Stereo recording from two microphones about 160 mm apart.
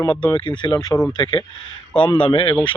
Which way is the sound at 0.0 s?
25° left (ahead or behind).